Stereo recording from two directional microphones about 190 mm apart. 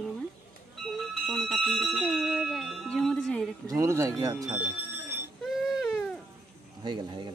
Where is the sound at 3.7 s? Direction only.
15° right (ahead or behind).